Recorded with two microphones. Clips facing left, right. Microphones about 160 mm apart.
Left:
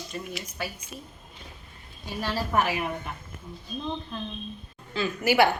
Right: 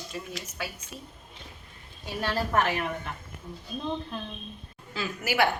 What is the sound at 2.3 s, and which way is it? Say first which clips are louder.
Speech: even; 5° left (ahead or behind).